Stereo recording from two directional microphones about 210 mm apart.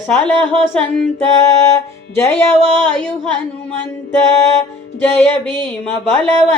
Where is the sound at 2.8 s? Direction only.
5° left (ahead or behind).